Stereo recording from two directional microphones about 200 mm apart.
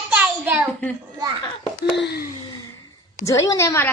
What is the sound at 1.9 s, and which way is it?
Wail, 55° left (ahead or behind).